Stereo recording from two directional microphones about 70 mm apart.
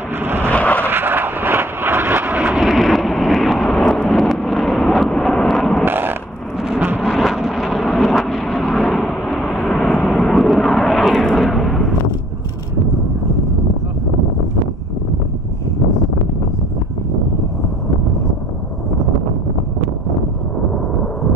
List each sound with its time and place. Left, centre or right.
0.2 s vehicle: right
0.5 s vehicle: left
0.8 s vehicle: right
2.5 s vehicle: centre
5.9 s a sound: right
7.0 s vehicle: centre